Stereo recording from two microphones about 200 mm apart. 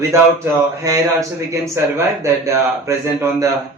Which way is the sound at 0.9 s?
15° right (ahead or behind).